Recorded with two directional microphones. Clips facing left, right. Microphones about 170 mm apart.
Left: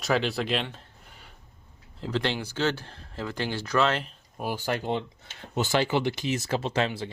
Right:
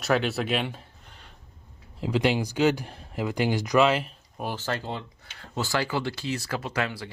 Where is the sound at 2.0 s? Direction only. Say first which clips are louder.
Right 4 dB; 10° right (ahead or behind).